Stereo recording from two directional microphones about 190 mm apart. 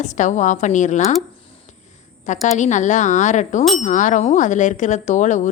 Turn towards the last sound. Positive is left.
turn(degrees=40)  # may be behind; listen again after turning